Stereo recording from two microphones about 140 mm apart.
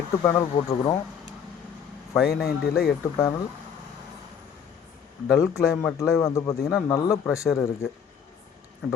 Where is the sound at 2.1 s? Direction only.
Centre (ahead or behind).